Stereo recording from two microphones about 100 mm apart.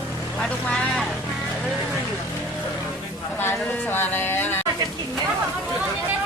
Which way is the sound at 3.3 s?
20° left (ahead or behind).